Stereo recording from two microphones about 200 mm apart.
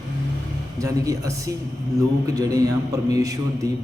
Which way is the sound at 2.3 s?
20° right (ahead or behind).